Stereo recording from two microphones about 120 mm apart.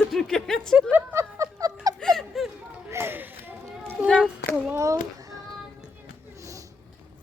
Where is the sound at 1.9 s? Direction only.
5° left (ahead or behind).